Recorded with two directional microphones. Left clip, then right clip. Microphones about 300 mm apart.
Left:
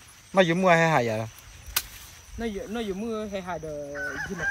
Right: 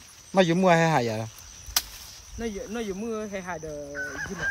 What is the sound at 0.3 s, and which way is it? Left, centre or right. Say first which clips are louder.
Speech: even; centre.